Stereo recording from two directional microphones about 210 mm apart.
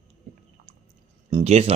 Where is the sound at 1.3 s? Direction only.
30° right (ahead or behind).